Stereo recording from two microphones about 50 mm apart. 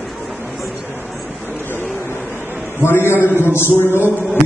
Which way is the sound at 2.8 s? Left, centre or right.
Left.